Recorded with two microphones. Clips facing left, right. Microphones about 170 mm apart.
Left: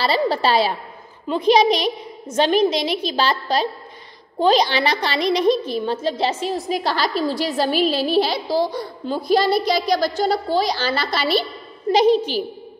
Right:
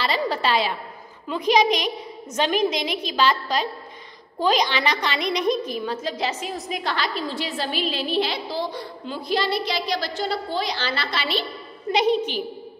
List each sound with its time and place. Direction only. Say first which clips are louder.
0.0 s a woman's voice: left 5 dB; 35° left (ahead or behind)